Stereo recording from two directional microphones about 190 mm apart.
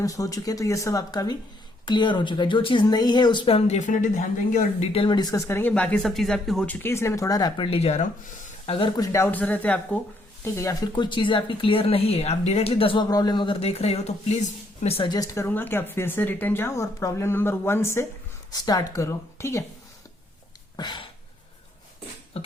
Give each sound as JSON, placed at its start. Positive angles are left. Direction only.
{"t": 0.0, "sound": "speech", "side_deg": 20}
{"t": 9.1, "sound": "speech", "side_deg": 10}
{"t": 20.7, "sound": "a sound", "side_deg": 25}